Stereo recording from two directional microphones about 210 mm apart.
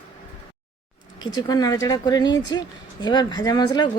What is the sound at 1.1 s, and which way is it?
Speech, 20° left (ahead or behind).